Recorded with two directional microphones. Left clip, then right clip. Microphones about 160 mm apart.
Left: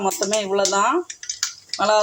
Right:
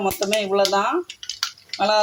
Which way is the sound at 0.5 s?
10° left (ahead or behind).